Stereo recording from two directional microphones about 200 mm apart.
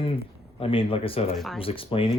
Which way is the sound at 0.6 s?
25° left (ahead or behind).